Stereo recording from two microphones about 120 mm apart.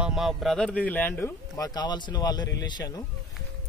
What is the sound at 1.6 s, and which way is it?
Speech, 35° left (ahead or behind).